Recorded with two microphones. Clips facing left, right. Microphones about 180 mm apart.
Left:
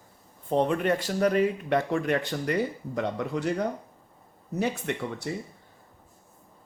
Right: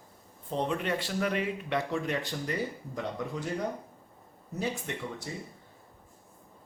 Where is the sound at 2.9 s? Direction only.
70° left (ahead or behind).